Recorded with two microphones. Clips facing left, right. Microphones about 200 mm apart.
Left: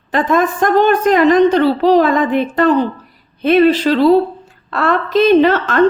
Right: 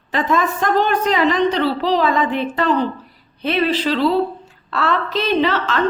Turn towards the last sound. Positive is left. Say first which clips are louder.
# left 7 dB
turn(degrees=50)  # may be behind; listen again after turning